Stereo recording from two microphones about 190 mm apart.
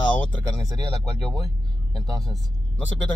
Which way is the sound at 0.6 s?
20° right (ahead or behind).